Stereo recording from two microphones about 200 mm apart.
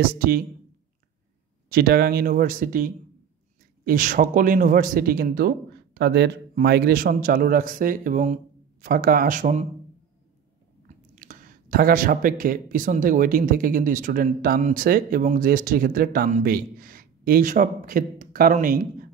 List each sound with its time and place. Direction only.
0.0 s speech: 50° right (ahead or behind)
1.7 s speech: 50° right (ahead or behind)
11.1 s speech: 45° right (ahead or behind)